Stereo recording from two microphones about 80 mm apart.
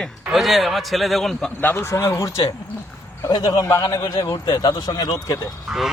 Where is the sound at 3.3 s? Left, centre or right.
Left.